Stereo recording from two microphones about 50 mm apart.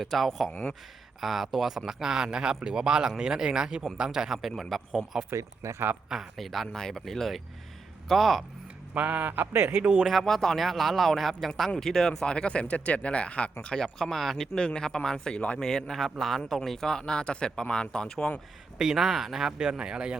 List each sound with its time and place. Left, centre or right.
0.0 s a man's voice: centre
0.5 s speech: centre
1.2 s a man's voice: centre
4.4 s a man's voice: centre
5.3 s speech: right
6.3 s a man's voice: centre
9.0 s speech: right
9.6 s speech: right
9.8 s speech: right
10.1 s a man's voice: centre
12.2 s speech: centre
13.8 s a man's voice: centre
14.5 s a man's voice: centre
18.8 s a man's voice: centre